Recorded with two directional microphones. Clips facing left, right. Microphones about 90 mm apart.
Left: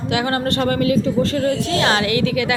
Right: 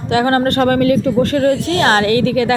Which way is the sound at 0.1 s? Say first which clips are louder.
Right 7 dB; 40° right (ahead or behind).